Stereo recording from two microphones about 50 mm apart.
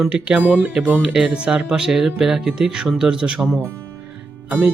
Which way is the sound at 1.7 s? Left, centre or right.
Centre.